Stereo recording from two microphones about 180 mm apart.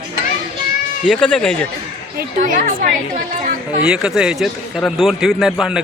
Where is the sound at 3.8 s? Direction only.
5° right (ahead or behind).